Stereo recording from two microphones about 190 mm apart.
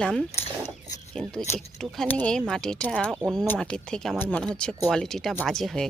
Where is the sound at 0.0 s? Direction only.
5° left (ahead or behind).